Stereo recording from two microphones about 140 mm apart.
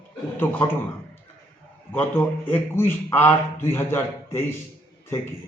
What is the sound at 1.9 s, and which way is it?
A man's voice, 15° left (ahead or behind).